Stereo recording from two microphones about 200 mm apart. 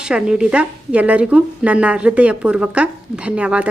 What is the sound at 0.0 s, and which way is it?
A woman's voice, 5° right (ahead or behind).